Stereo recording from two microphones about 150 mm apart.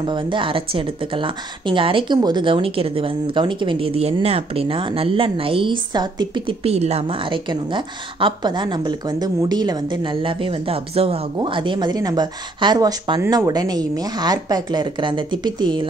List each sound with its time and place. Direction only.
0.0 s speech: 30° right (ahead or behind)